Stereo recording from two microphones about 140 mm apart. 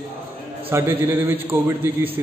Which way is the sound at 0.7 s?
15° right (ahead or behind).